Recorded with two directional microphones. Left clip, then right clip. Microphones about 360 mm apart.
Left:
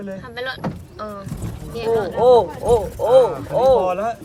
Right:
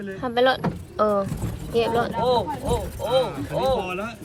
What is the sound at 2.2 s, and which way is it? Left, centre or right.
Speech, left.